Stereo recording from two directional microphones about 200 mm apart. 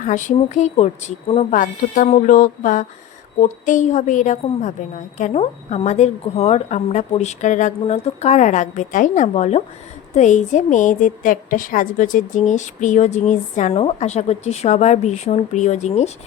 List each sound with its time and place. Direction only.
0.0 s a woman's voice: 40° left (ahead or behind)